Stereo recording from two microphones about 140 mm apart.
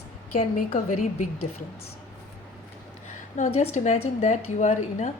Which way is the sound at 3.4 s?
60° left (ahead or behind).